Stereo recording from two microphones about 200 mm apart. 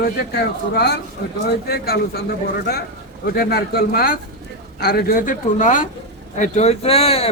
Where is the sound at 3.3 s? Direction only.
50° left (ahead or behind).